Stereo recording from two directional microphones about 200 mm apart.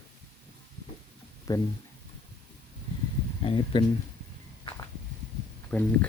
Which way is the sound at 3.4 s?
25° left (ahead or behind).